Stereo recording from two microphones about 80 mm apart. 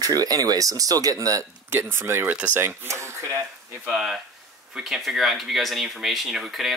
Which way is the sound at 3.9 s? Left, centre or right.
Centre.